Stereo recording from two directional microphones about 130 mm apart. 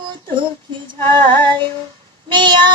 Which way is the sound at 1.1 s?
35° right (ahead or behind).